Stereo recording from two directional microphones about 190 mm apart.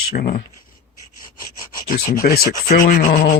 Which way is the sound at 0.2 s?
50° left (ahead or behind).